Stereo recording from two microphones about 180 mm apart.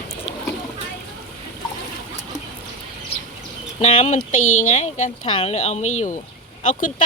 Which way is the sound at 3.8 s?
40° left (ahead or behind).